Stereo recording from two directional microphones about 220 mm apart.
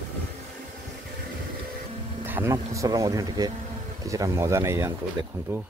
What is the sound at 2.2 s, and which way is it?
Speech, 10° right (ahead or behind).